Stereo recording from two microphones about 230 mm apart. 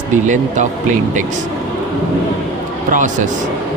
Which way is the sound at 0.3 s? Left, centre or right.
Right.